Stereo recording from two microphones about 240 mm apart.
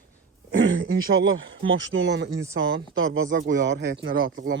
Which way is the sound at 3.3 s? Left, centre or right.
Right.